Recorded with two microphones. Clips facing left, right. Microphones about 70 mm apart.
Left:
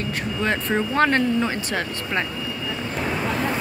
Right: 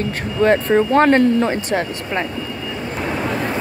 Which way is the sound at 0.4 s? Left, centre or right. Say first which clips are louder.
Right 10 dB; right.